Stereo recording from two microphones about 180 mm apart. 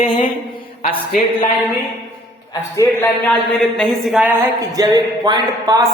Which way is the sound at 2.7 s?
15° left (ahead or behind).